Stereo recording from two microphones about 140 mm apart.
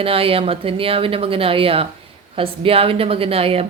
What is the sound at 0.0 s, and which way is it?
A woman's voice, 40° right (ahead or behind).